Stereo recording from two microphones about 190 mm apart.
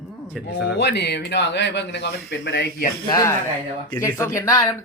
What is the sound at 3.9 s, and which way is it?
Speech, 15° left (ahead or behind).